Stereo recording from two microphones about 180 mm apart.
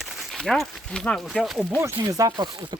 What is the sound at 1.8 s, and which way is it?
Speech, 15° right (ahead or behind).